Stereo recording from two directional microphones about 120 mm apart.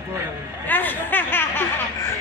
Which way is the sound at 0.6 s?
15° left (ahead or behind).